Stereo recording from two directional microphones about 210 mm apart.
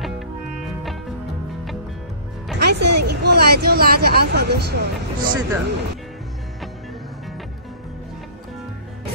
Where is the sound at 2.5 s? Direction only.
50° right (ahead or behind).